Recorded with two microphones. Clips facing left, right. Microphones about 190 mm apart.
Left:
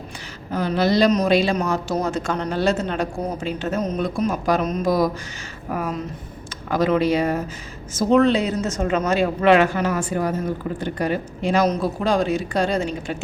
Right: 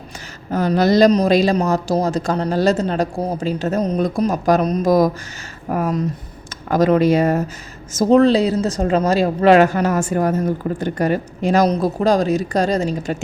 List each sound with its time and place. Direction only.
0.5 s a woman's voice: 45° right (ahead or behind)